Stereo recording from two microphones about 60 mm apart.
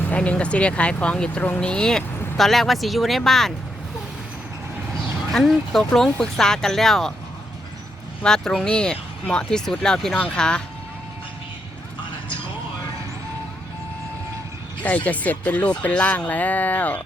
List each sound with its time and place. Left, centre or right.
0.2 s speech: centre
5.3 s speech: centre
8.2 s speech: centre
14.8 s speech: left